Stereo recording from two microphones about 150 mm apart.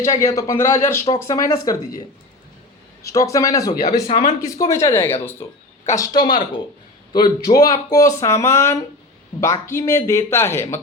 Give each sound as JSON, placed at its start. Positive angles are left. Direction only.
{"t": 0.0, "sound": "speech", "side_deg": 20}
{"t": 3.0, "sound": "speech", "side_deg": 20}